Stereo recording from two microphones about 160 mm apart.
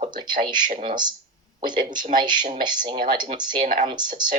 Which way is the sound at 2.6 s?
30° right (ahead or behind).